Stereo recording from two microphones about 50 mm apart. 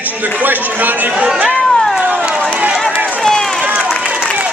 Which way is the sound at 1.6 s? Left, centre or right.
Centre.